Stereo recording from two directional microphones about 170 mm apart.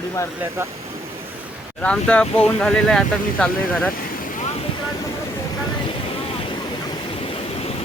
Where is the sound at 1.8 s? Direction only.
5° left (ahead or behind).